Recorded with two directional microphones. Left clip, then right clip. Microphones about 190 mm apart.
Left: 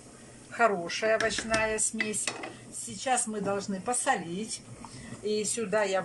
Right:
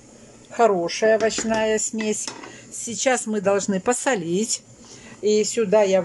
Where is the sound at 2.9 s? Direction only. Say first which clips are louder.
Right 8 dB; 50° right (ahead or behind).